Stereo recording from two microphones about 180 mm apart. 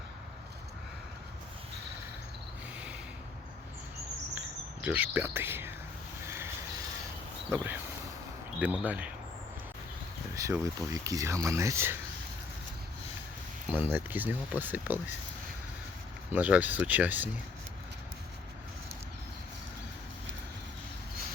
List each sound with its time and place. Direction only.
4.4 s cricket: 5° right (ahead or behind)
6.2 s vehicle: 15° right (ahead or behind)
7.5 s speech: 10° right (ahead or behind)
10.3 s speech: 15° right (ahead or behind)
13.7 s speech: 10° right (ahead or behind)
16.3 s speech: 10° right (ahead or behind)